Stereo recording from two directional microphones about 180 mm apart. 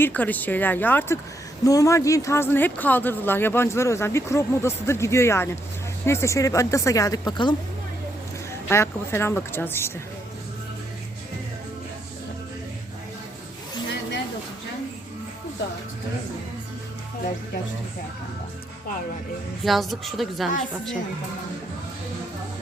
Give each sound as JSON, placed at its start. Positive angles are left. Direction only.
{"t": 0.0, "sound": "speech", "side_deg": 10}
{"t": 8.7, "sound": "speech", "side_deg": 15}
{"t": 19.6, "sound": "a woman's voice", "side_deg": 0}